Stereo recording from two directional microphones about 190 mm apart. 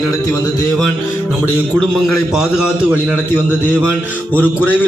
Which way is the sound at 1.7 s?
Centre (ahead or behind).